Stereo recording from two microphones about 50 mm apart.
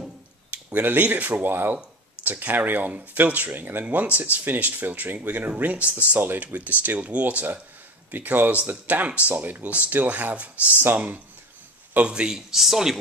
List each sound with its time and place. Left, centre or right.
0.5 s speech: right
6.1 s speech: right
6.4 s speech: right
12.0 s speech: centre